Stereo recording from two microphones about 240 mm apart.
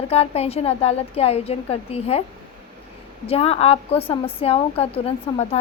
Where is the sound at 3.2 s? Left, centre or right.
Left.